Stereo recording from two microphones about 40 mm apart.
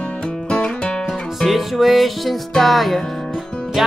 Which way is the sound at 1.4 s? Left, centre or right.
Centre.